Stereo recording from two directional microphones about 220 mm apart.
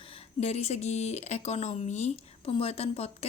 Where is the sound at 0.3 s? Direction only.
30° left (ahead or behind).